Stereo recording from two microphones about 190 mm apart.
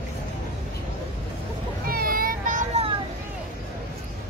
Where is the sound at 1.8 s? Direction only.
50° right (ahead or behind).